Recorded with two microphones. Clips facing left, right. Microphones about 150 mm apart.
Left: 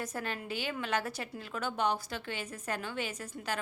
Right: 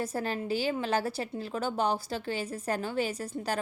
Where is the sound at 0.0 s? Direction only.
30° right (ahead or behind).